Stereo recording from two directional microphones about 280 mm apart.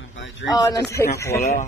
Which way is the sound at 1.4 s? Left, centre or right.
Left.